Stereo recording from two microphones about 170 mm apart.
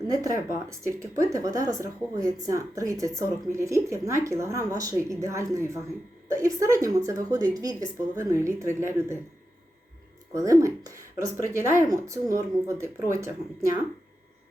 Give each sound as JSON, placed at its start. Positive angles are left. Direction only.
{"t": 0.1, "sound": "a woman's voice", "side_deg": -20}
{"t": 10.3, "sound": "speech", "side_deg": -20}